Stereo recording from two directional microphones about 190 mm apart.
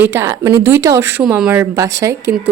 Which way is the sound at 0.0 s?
15° right (ahead or behind).